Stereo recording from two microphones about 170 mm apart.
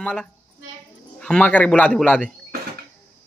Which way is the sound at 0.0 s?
5° left (ahead or behind).